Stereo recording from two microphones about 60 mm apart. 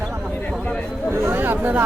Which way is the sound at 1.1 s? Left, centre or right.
Right.